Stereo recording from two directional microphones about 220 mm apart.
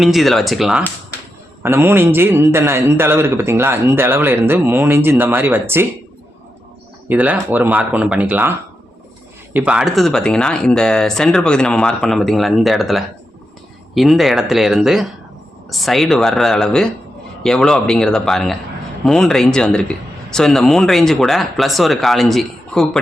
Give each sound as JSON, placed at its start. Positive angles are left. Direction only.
{"t": 0.0, "sound": "a man's voice", "side_deg": 0}
{"t": 7.1, "sound": "a man's voice", "side_deg": -5}